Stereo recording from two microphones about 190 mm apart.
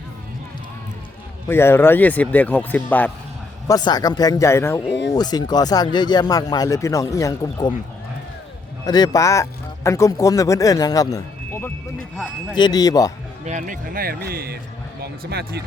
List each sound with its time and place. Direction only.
1.5 s a man's voice: 10° left (ahead or behind)
3.7 s speech: 20° left (ahead or behind)
8.9 s speech: 20° left (ahead or behind)
13.4 s a man's voice: 40° right (ahead or behind); by 15.6 s 60° right (ahead or behind)